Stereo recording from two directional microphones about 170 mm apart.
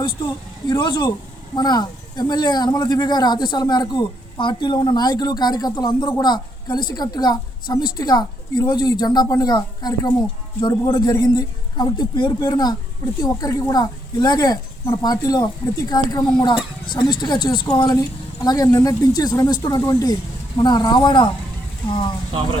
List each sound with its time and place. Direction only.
0.7 s speech: 25° left (ahead or behind)